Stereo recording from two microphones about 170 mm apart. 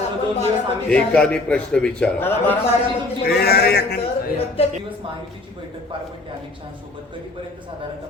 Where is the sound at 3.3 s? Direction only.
65° left (ahead or behind).